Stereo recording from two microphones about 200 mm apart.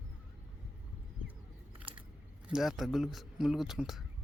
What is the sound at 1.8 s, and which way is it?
Biting, 25° right (ahead or behind).